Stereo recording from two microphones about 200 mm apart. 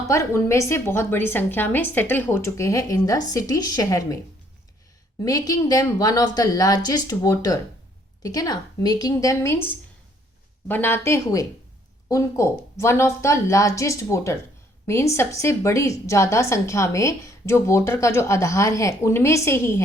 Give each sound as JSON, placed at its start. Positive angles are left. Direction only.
{"t": 0.1, "sound": "a woman's voice", "side_deg": 15}
{"t": 5.2, "sound": "a woman's voice", "side_deg": 15}
{"t": 10.7, "sound": "a woman's voice", "side_deg": 10}